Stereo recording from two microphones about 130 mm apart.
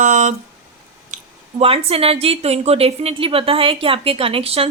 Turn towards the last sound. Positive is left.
turn(degrees=-45)  # may be behind; listen again after turning